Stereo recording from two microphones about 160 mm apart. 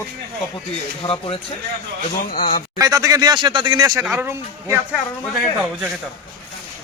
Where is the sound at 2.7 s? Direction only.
20° right (ahead or behind).